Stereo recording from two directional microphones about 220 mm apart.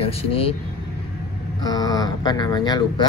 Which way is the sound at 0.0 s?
25° left (ahead or behind).